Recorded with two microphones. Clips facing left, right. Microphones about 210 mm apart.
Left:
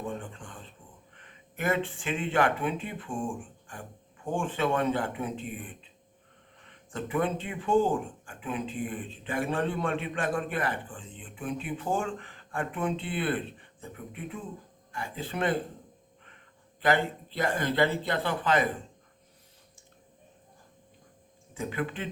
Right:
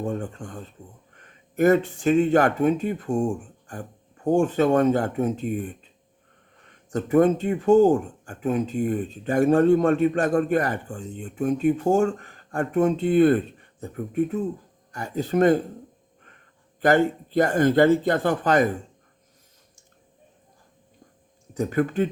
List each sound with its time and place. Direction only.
0.0 s speech: 45° right (ahead or behind)
16.8 s speech: 45° right (ahead or behind)
21.5 s speech: 40° right (ahead or behind)